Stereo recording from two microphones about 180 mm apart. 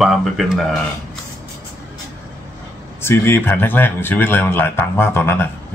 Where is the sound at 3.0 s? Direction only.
15° left (ahead or behind).